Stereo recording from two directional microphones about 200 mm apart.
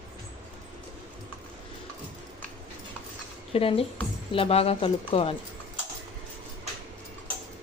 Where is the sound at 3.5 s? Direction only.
30° left (ahead or behind).